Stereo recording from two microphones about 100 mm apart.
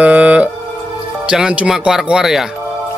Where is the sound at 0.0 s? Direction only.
15° right (ahead or behind).